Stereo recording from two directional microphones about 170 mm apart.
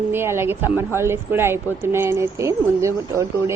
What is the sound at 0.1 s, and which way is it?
Speech, 15° right (ahead or behind).